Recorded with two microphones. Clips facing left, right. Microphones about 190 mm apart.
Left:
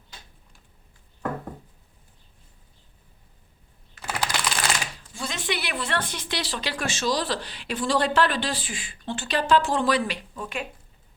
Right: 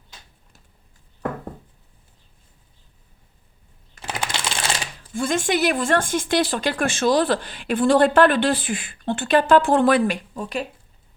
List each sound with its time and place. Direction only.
4.0 s typing: 25° right (ahead or behind)
5.1 s speech: 50° right (ahead or behind)